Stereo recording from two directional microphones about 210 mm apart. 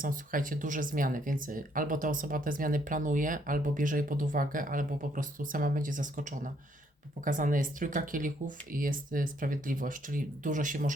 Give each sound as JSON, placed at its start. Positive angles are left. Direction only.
{"t": 0.0, "sound": "speech", "side_deg": -40}